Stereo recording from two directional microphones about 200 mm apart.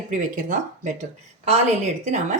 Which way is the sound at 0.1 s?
40° right (ahead or behind).